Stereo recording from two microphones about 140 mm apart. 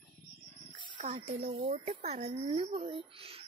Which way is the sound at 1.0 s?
50° right (ahead or behind).